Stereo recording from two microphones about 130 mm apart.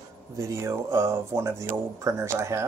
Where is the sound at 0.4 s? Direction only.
20° right (ahead or behind).